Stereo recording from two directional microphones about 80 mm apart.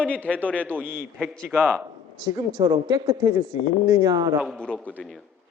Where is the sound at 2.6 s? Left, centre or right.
Right.